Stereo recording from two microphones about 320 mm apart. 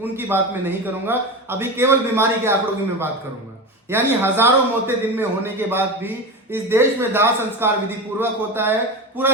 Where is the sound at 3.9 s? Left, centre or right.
Centre.